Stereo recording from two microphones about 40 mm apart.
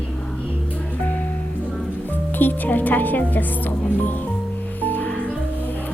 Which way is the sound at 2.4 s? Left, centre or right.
Left.